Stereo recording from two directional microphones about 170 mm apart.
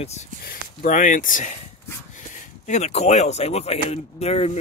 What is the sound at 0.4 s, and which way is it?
Speech, 55° left (ahead or behind).